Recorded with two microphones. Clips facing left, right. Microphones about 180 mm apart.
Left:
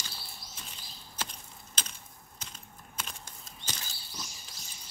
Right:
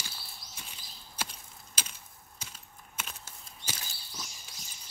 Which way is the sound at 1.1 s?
10° right (ahead or behind).